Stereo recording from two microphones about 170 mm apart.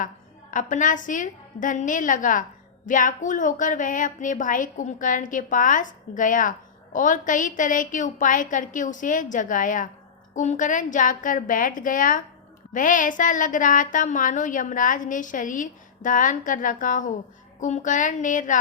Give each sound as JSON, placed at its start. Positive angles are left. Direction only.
{"t": 0.5, "sound": "a woman's voice", "side_deg": 50}